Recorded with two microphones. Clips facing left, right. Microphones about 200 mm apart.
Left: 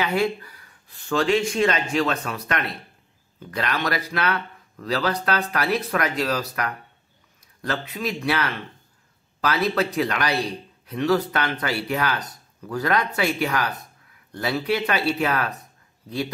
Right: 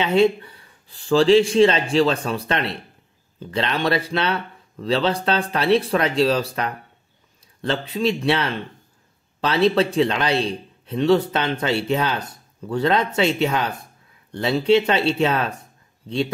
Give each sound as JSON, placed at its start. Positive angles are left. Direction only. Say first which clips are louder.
{"t": 0.0, "sound": "a man's voice", "louder": "right 6 dB", "side_deg": -25}